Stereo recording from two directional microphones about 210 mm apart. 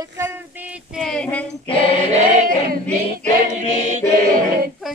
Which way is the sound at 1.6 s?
25° left (ahead or behind).